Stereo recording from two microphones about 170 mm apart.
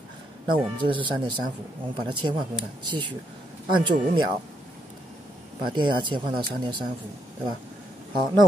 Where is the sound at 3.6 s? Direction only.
25° right (ahead or behind).